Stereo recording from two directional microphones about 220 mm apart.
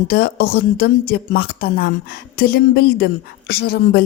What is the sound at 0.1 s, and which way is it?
Speech, 45° left (ahead or behind).